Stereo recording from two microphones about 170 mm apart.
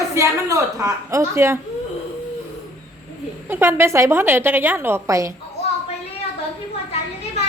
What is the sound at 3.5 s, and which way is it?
A woman's voice, 15° right (ahead or behind).